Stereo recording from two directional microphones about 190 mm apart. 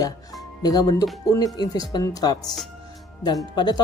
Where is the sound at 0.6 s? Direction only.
20° left (ahead or behind).